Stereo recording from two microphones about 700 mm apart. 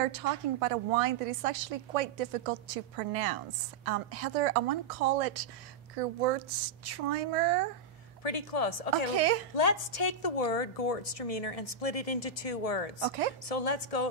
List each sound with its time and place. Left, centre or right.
0.0 s a woman's voice: right
8.2 s a woman's voice: left
9.1 s a woman's voice: right
9.6 s a woman's voice: left